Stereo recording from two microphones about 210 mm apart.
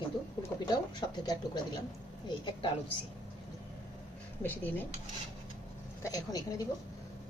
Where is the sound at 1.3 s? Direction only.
20° left (ahead or behind).